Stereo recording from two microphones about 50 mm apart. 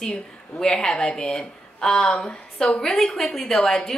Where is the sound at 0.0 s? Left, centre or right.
Centre.